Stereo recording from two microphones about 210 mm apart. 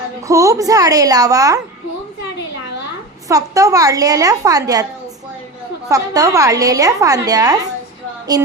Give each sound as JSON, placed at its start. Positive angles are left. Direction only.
{"t": 0.3, "sound": "a woman's voice", "side_deg": -15}
{"t": 3.2, "sound": "a woman's voice", "side_deg": -15}
{"t": 5.9, "sound": "a woman's voice", "side_deg": -15}